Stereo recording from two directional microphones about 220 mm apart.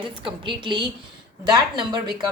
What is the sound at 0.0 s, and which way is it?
Speech, 20° right (ahead or behind).